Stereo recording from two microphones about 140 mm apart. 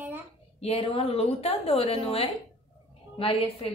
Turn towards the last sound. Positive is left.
turn(degrees=40)  # may be behind; listen again after turning